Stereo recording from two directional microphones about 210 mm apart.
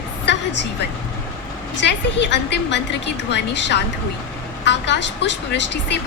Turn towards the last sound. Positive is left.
turn(degrees=55)  # may be behind; listen again after turning